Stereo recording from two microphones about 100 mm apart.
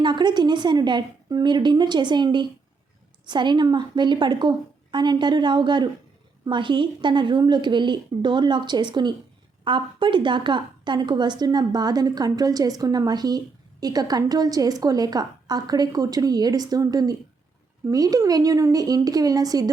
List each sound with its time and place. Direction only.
0.0 s a woman's voice: 50° right (ahead or behind)